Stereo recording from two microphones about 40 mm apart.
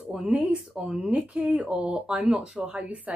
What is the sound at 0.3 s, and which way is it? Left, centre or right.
Speech, right.